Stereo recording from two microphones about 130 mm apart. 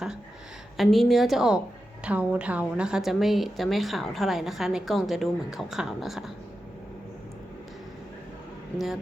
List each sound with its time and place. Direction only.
0.8 s a woman's voice: centre (ahead or behind)